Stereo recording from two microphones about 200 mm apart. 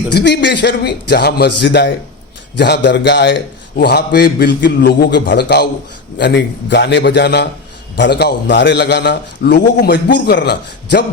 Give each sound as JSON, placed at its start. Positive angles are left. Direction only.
{"t": 0.1, "sound": "a man's voice", "side_deg": 55}